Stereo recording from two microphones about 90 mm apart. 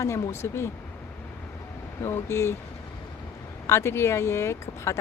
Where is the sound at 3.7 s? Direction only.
30° left (ahead or behind).